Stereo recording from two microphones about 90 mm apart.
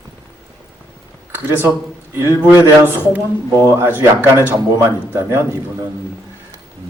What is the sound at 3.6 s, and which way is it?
Speech, 35° right (ahead or behind).